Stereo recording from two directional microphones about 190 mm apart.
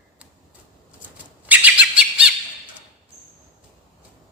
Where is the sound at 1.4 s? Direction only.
10° right (ahead or behind).